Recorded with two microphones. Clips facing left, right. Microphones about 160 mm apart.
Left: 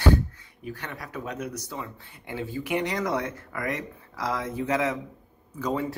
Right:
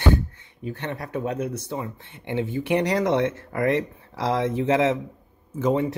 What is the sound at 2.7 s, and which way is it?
Speech, 35° right (ahead or behind).